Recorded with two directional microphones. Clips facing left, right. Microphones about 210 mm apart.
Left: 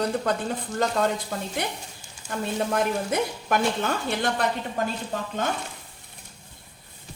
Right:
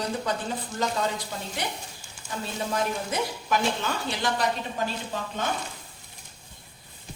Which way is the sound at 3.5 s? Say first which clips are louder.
Left 2 dB; 55° left (ahead or behind).